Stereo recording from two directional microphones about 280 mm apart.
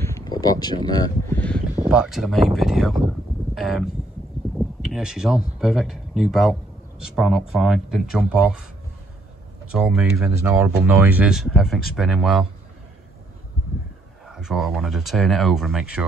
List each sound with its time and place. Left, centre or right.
0.0 s a sound: centre
1.8 s speech: centre
9.7 s speech: centre
14.2 s speech: centre